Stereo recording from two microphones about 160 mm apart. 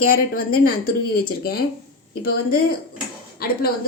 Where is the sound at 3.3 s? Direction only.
75° left (ahead or behind).